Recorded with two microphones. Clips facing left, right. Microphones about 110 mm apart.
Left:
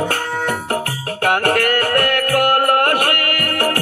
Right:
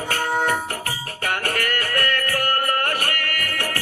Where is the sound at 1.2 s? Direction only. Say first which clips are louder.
Left 9 dB; 60° left (ahead or behind).